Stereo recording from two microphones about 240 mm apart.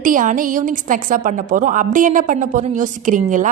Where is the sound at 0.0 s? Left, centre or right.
Right.